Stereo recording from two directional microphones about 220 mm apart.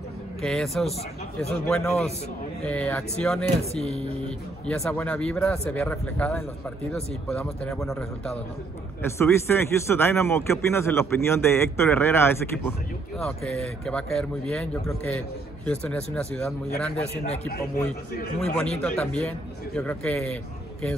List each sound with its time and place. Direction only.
0.4 s speech: centre (ahead or behind)
3.7 s a man's voice: 30° left (ahead or behind)
4.6 s speech: 5° left (ahead or behind)
16.9 s a man's voice: 30° left (ahead or behind)
18.6 s speech: 5° left (ahead or behind)